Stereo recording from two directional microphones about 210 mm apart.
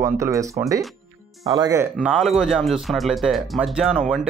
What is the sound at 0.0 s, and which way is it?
Speech, 15° right (ahead or behind).